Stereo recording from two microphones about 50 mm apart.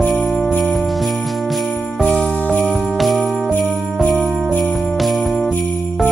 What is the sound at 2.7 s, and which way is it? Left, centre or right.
Jingle bell, centre.